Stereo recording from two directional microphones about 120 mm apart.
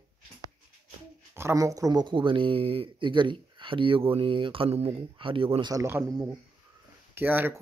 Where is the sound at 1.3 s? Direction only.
20° right (ahead or behind); by 5.7 s 45° right (ahead or behind).